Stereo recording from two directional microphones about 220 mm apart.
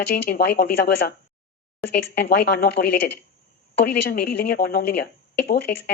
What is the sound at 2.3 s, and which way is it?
A woman's voice, 50° left (ahead or behind).